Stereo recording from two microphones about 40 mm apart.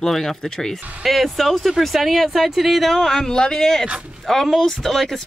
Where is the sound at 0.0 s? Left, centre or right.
Centre.